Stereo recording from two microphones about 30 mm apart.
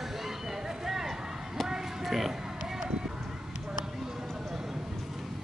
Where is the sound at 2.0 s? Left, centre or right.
Centre.